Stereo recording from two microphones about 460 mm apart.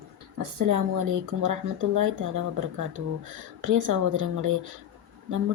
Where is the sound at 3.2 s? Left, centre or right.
Right.